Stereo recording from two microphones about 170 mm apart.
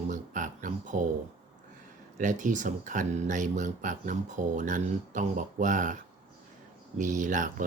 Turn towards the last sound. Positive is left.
turn(degrees=-50)  # may be behind; listen again after turning